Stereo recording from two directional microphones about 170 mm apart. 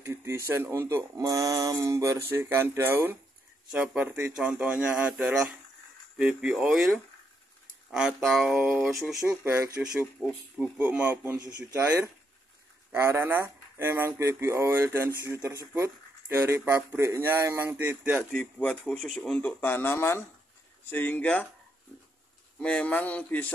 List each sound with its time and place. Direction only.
0.0 s speech: 15° right (ahead or behind)
8.9 s speech: 15° right (ahead or behind)
18.3 s speech: 10° left (ahead or behind)
22.6 s speech: 5° left (ahead or behind)